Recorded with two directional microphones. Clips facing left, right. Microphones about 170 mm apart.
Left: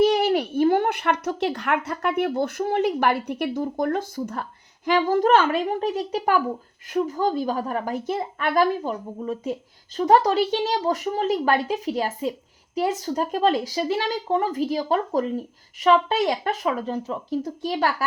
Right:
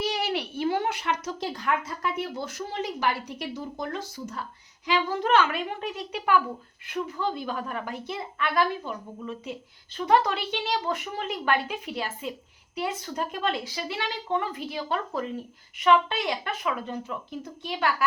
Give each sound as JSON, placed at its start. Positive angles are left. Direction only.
{"t": 0.0, "sound": "a woman's voice", "side_deg": 50}